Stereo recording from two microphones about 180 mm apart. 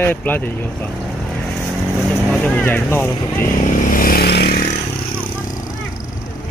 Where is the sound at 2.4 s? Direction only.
10° left (ahead or behind).